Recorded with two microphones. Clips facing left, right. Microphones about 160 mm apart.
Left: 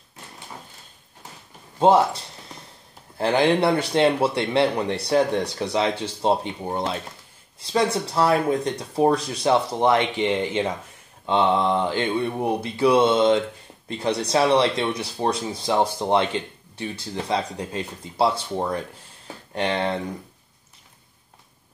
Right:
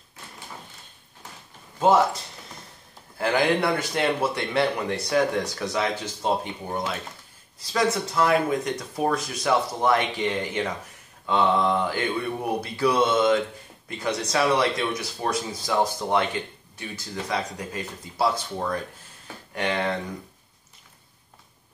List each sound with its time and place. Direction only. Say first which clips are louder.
3.2 s speech: left 3 dB; 25° left (ahead or behind)